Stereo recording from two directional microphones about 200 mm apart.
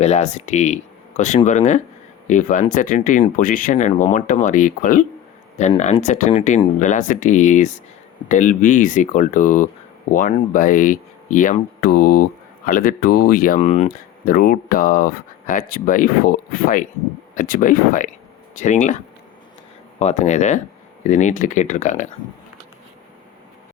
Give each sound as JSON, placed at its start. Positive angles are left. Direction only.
{"t": 0.0, "sound": "speech", "side_deg": 35}
{"t": 13.6, "sound": "speech", "side_deg": 35}
{"t": 20.0, "sound": "speech", "side_deg": 35}